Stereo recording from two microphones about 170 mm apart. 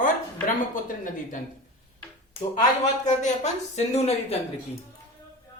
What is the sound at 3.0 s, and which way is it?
A woman's voice, 45° left (ahead or behind).